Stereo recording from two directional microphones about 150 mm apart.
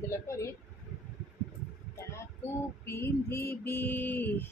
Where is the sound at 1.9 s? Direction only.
20° left (ahead or behind).